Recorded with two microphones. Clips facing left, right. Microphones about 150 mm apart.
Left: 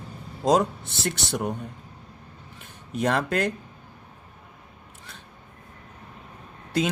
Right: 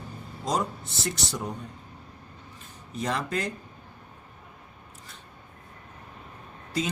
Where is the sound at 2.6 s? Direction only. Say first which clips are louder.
Left 6 dB; 65° left (ahead or behind).